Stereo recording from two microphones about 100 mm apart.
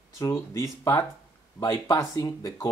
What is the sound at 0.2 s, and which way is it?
Speech, 35° left (ahead or behind).